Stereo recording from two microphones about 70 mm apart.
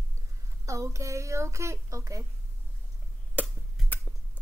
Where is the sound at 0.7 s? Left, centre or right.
Right.